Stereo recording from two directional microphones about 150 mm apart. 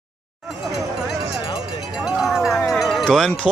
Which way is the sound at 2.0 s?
5° right (ahead or behind).